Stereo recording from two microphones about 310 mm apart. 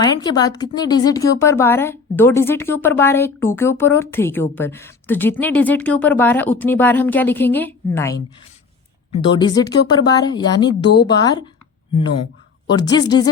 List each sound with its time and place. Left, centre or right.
0.0 s speech: centre